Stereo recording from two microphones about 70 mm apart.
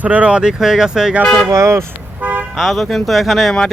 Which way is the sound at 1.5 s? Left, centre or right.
Right.